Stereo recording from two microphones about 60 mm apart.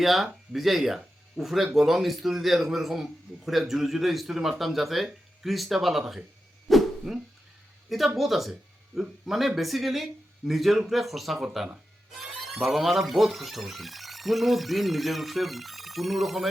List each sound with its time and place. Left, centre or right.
0.0 s speech: centre
6.7 s a sound: centre
7.9 s speech: centre
12.6 s speech: centre